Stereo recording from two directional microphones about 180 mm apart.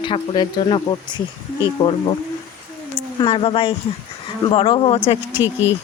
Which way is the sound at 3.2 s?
30° left (ahead or behind).